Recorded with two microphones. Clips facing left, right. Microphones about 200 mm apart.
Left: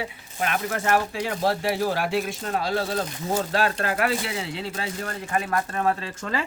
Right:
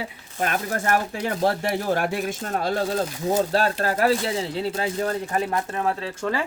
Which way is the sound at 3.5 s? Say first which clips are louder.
Right 2 dB; 35° right (ahead or behind).